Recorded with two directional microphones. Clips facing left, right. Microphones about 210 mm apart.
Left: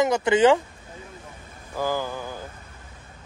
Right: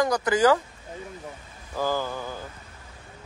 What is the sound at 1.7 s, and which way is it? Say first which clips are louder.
Speech: even; 15° left (ahead or behind).